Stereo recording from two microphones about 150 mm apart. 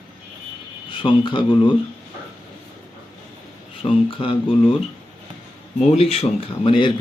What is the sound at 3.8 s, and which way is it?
Speech, 35° left (ahead or behind).